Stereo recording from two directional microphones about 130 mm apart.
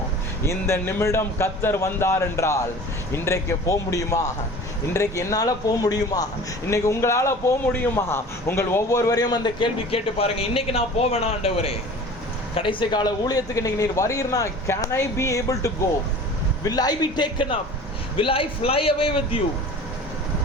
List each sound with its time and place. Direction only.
0.4 s a man's voice: 20° left (ahead or behind); by 19.4 s 45° left (ahead or behind)